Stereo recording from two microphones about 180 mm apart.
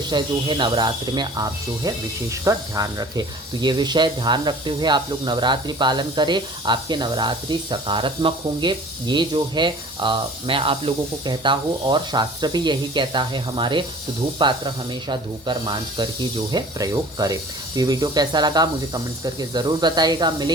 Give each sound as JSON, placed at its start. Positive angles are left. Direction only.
{"t": 0.1, "sound": "speech", "side_deg": -25}